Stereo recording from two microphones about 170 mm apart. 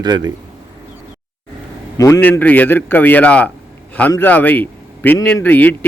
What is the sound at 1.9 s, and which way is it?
A man's voice, 20° left (ahead or behind).